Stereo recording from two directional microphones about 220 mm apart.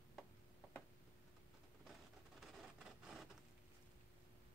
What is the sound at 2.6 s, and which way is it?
Rub, 5° right (ahead or behind).